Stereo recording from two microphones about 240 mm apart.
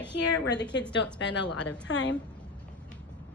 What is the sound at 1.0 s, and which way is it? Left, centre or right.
Speech, left.